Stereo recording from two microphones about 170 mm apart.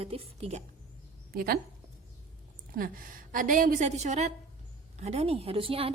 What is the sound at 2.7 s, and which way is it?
A woman's voice, 55° right (ahead or behind).